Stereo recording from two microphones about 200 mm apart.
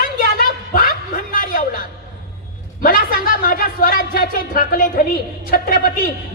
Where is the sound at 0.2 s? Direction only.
45° left (ahead or behind).